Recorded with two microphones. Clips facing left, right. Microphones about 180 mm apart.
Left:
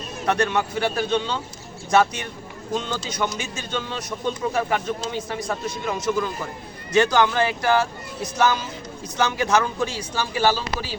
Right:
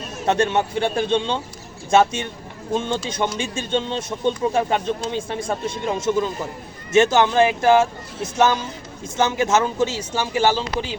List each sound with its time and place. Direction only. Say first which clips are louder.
0.3 s a man's voice: right 3 dB; 25° right (ahead or behind)